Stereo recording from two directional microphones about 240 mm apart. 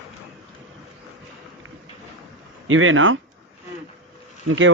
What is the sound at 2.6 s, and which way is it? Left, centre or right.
Speech, right.